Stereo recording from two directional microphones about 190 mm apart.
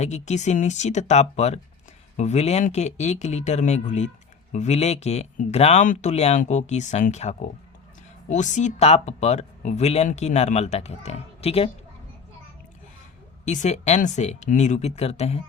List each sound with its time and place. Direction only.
0.0 s speech: 35° left (ahead or behind)
13.4 s speech: 40° left (ahead or behind)